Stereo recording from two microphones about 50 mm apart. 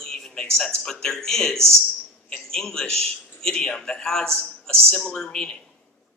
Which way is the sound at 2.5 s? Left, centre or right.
Centre.